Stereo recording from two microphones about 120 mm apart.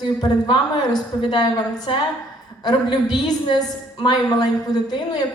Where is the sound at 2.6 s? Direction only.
35° left (ahead or behind).